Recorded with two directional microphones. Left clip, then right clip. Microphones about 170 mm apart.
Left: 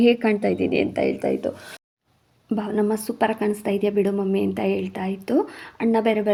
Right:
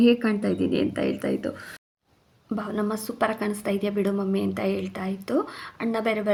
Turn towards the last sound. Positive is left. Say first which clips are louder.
# left 5 dB
turn(degrees=25)  # may be behind; listen again after turning